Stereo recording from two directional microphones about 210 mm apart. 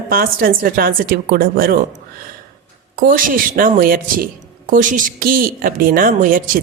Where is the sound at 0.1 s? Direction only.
45° right (ahead or behind).